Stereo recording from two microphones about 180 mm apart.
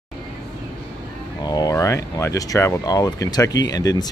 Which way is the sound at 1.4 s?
20° left (ahead or behind).